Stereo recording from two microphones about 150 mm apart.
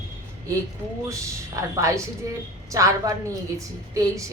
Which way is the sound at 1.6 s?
20° right (ahead or behind).